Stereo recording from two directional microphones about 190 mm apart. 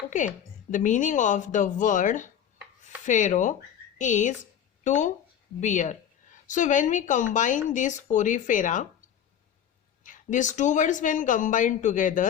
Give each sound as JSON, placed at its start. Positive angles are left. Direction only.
{"t": 0.7, "sound": "a woman's voice", "side_deg": 40}
{"t": 10.0, "sound": "speech", "side_deg": 40}